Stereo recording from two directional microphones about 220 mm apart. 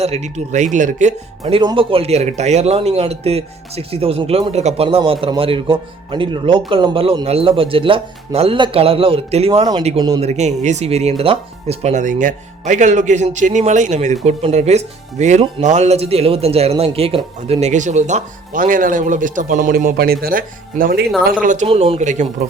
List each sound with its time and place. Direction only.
0.0 s speech: 30° right (ahead or behind)